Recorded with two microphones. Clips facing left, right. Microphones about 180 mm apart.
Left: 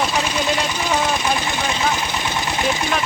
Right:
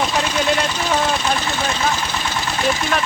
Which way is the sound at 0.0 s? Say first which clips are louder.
Right 1 dB; 10° left (ahead or behind).